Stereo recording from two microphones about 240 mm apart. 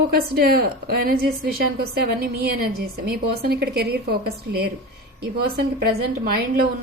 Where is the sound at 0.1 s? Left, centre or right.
Right.